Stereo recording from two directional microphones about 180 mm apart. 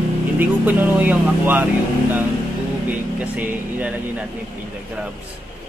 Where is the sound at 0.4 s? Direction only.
10° right (ahead or behind).